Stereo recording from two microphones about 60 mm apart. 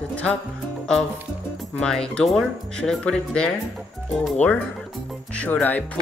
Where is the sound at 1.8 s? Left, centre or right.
Centre.